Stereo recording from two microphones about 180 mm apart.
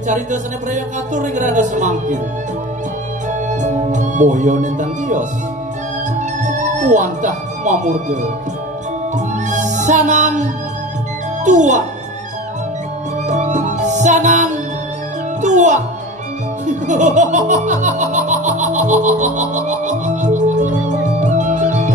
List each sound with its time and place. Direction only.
0.0 s music: 40° right (ahead or behind)
3.4 s speech: 40° right (ahead or behind)
6.1 s music: 45° right (ahead or behind)
13.3 s music: 40° right (ahead or behind)